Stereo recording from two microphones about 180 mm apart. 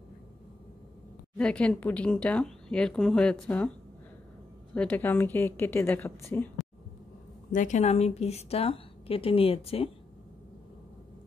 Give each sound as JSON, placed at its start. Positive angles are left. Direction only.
{"t": 1.4, "sound": "speech", "side_deg": 5}
{"t": 4.7, "sound": "a woman's voice", "side_deg": 10}
{"t": 7.5, "sound": "a woman's voice", "side_deg": 40}